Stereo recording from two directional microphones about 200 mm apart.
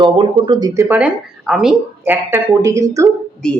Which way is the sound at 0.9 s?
5° right (ahead or behind).